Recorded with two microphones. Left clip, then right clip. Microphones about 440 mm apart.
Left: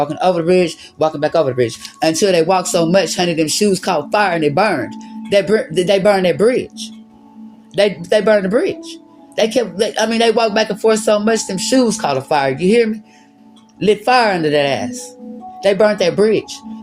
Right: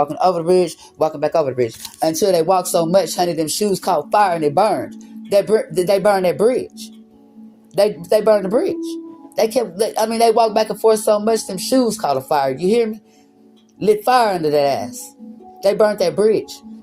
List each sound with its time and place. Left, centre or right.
0.0 s speech: right
7.8 s speech: right